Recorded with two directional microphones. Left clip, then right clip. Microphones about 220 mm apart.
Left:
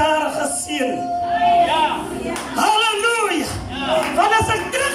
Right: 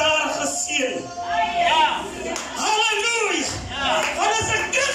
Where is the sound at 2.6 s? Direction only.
45° left (ahead or behind).